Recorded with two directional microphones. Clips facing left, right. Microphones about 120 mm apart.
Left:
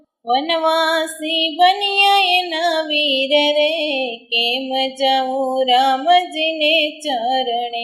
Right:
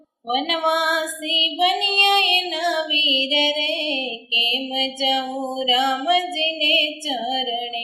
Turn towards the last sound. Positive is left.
turn(degrees=55)  # may be behind; listen again after turning